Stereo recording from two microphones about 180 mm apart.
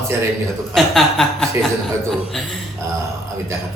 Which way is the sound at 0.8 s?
Centre (ahead or behind).